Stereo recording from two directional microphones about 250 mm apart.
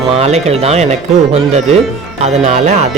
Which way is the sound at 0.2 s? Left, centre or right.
Right.